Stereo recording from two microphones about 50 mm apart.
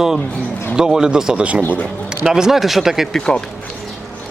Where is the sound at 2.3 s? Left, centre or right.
Centre.